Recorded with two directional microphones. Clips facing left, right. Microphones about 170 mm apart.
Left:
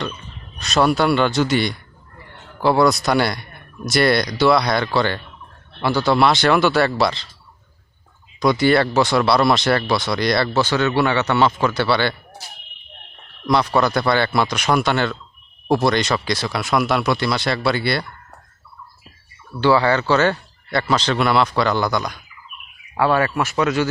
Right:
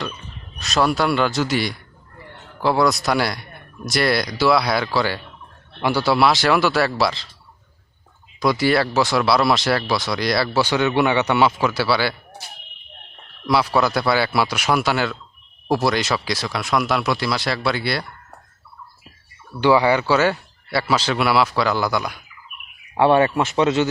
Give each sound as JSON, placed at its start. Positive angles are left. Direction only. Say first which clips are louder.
{"t": 0.6, "sound": "speech", "louder": "left 2 dB", "side_deg": 0}
{"t": 8.4, "sound": "speech", "louder": "left 2 dB", "side_deg": -5}
{"t": 13.5, "sound": "speech", "louder": "left 1 dB", "side_deg": -5}
{"t": 19.5, "sound": "speech", "louder": "even", "side_deg": -15}
{"t": 23.0, "sound": "speech", "louder": "right 3 dB", "side_deg": -25}